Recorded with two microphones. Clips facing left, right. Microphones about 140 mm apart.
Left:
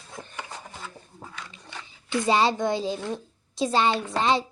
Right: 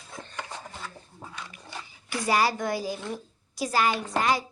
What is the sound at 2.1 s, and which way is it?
A woman's voice, 25° left (ahead or behind).